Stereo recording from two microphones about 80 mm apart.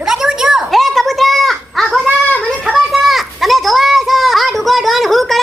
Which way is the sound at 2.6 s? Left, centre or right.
Centre.